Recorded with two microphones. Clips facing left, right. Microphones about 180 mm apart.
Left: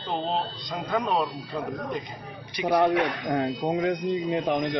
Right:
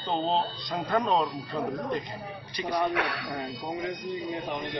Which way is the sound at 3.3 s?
60° left (ahead or behind).